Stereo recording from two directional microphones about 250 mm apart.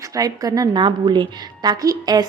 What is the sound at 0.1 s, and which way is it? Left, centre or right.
A woman's voice, centre.